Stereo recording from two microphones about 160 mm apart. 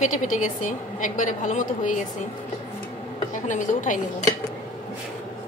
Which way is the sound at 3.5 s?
50° left (ahead or behind).